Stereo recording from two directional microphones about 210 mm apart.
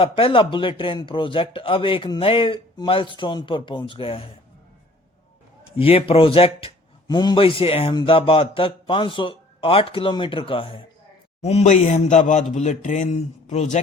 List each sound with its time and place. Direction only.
0.0 s a man's voice: 25° left (ahead or behind)
5.8 s a man's voice: 25° left (ahead or behind)